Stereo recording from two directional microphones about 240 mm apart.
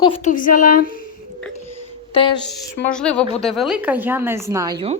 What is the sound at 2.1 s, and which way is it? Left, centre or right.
Speech, left.